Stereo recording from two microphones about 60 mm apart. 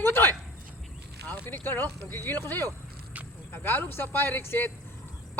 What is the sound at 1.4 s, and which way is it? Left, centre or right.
A man's voice, left.